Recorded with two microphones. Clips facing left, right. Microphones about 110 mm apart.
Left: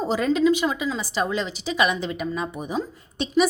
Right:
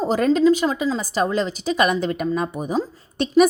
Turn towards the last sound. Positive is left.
turn(degrees=-45)  # may be behind; listen again after turning